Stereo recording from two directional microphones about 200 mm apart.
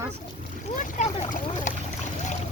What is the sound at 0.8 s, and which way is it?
Speech, 35° left (ahead or behind).